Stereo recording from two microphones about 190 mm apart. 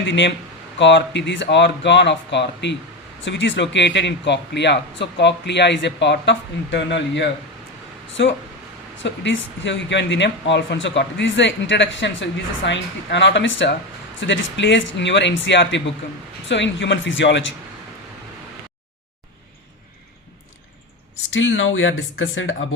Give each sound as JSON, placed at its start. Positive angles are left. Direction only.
{"t": 0.0, "sound": "speech", "side_deg": 70}
{"t": 21.3, "sound": "speech", "side_deg": 90}